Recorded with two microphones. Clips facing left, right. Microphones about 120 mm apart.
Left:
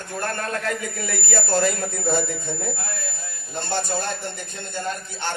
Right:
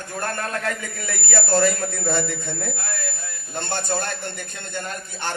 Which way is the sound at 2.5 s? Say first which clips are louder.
Left 1 dB; 70° right (ahead or behind).